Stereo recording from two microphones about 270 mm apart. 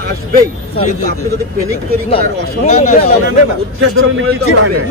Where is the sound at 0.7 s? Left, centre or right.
Left.